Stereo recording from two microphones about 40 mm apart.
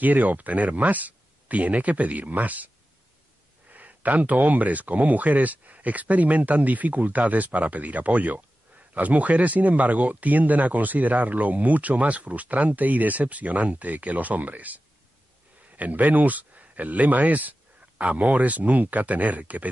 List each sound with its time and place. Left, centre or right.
0.0 s speech: right
3.7 s a man's voice: right
17.3 s a sound: right
18.1 s speech: right